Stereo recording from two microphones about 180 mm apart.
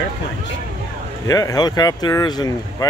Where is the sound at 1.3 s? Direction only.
20° left (ahead or behind).